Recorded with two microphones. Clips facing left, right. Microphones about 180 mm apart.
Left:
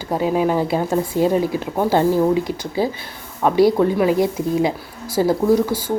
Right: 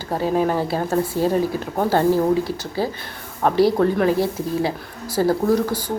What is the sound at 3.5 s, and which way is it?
A woman's voice, 10° left (ahead or behind).